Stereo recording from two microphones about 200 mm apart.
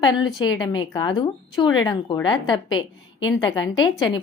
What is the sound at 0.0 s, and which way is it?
A woman's voice, 25° left (ahead or behind).